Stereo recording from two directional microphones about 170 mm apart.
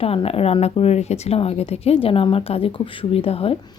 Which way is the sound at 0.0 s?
35° left (ahead or behind).